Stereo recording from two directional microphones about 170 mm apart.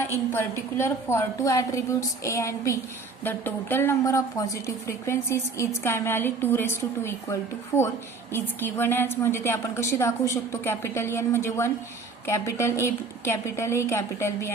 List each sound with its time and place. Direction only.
0.0 s a woman's voice: 15° left (ahead or behind)